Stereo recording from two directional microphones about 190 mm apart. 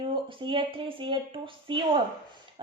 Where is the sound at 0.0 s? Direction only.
25° right (ahead or behind).